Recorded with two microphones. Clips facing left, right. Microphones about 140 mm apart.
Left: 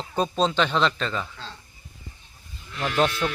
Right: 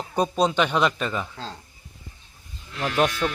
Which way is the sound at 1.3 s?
40° right (ahead or behind).